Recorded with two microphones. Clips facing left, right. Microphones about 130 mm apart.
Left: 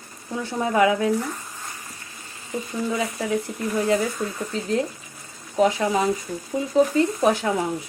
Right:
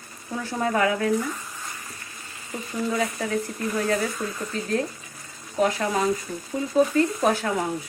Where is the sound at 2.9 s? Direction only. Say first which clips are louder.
Left 1 dB; 15° left (ahead or behind).